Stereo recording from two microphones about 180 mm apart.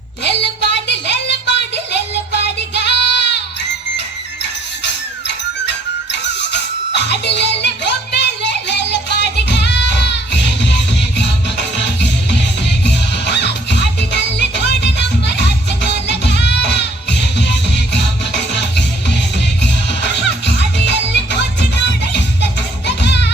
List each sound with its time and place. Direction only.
0.3 s a sound: 70° left (ahead or behind)
5.6 s music: 75° left (ahead or behind)
12.6 s music: 70° left (ahead or behind)
21.1 s music: 70° left (ahead or behind)